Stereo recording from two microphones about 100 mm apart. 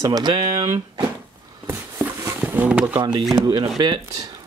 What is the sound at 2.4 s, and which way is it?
Speech, 15° right (ahead or behind).